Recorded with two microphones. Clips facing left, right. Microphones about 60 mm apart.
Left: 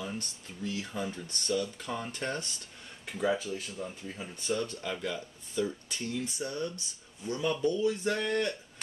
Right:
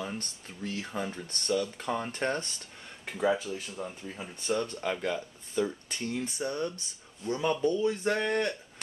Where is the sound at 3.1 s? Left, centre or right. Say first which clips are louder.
Right 2 dB; centre.